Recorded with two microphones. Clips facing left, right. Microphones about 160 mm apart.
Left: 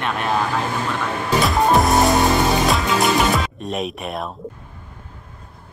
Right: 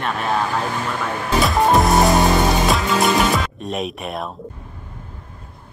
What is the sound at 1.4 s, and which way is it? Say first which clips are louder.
Music: right 1 dB; centre (ahead or behind).